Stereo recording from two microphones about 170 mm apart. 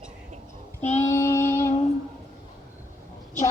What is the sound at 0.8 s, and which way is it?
Child singing, 40° left (ahead or behind).